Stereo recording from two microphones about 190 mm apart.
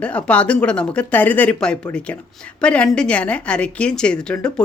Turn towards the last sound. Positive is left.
turn(degrees=5)  # may be behind; listen again after turning